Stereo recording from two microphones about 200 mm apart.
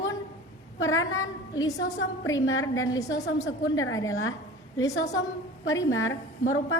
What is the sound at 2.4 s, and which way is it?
Speech, 75° left (ahead or behind).